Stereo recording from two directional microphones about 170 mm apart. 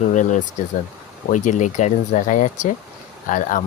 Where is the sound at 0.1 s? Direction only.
45° left (ahead or behind).